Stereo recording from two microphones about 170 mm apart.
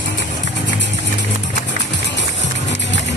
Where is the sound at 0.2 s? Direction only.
90° left.